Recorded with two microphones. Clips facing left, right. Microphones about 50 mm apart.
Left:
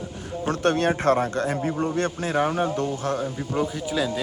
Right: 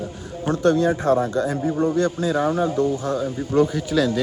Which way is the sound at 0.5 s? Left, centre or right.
Left.